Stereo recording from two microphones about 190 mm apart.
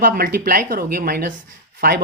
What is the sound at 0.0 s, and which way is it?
Speech, 50° right (ahead or behind).